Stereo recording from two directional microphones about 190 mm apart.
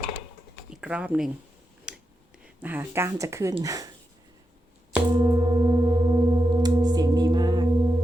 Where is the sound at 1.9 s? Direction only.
5° right (ahead or behind).